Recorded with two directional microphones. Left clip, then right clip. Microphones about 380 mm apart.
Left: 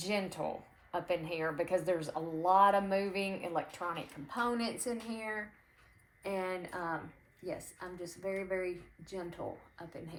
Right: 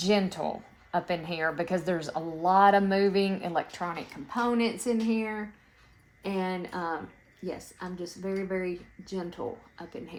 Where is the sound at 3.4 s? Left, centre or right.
Right.